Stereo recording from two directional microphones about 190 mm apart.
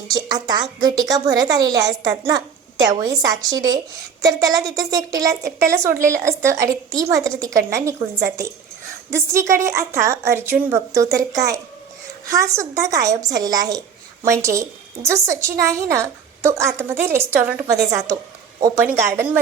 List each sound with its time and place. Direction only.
0.1 s a woman's voice: 20° right (ahead or behind)
9.1 s a woman's voice: 15° right (ahead or behind)